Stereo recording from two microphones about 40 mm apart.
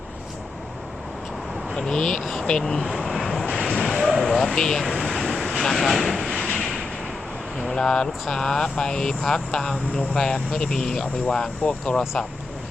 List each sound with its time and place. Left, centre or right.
1.7 s speech: centre
2.8 s vehicle: centre
3.7 s a sound: centre
4.1 s a sound: centre
4.5 s speech: centre
5.0 s vehicle: centre
5.6 s speech: centre
6.2 s vehicle: left
7.8 s speech: centre